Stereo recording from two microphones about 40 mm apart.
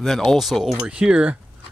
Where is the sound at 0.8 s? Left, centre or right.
Right.